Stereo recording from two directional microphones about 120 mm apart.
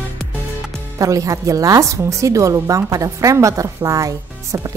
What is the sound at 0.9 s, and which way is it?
A woman's voice, 30° right (ahead or behind).